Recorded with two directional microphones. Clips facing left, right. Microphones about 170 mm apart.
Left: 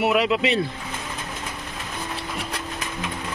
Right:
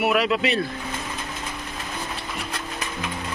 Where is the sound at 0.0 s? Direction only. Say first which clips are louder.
Left 1 dB; 20° left (ahead or behind).